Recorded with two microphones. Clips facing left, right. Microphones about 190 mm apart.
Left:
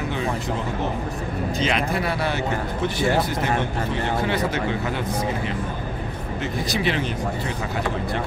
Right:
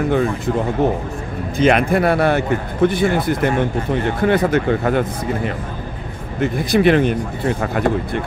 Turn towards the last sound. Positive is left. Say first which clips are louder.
# right 8 dB
turn(degrees=-55)  # may be behind; listen again after turning